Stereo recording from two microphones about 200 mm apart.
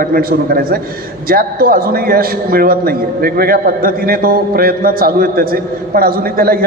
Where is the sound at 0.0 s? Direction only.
45° right (ahead or behind).